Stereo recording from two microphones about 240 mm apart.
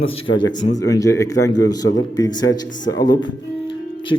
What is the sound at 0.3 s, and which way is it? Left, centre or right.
A man's voice, centre.